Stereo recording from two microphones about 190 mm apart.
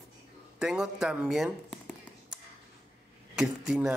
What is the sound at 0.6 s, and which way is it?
Speech, 5° right (ahead or behind).